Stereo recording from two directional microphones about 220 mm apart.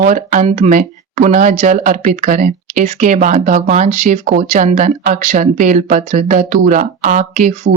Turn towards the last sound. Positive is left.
turn(degrees=-35)  # may be behind; listen again after turning